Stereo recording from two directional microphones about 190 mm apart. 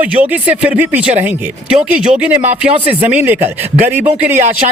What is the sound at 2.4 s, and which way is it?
Speech, 35° right (ahead or behind).